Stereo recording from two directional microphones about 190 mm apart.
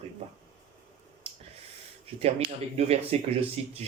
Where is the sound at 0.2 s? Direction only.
35° right (ahead or behind).